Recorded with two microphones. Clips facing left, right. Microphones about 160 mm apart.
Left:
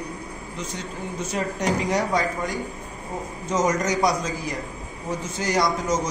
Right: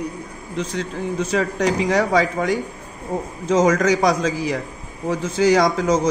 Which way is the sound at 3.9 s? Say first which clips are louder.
Right 5 dB; 90° right.